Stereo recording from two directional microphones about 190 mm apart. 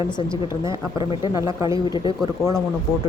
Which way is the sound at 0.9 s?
20° left (ahead or behind).